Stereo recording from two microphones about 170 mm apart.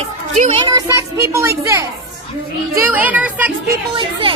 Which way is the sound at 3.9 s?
30° right (ahead or behind).